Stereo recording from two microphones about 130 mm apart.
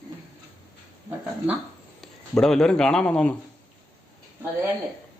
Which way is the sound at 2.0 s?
5° left (ahead or behind).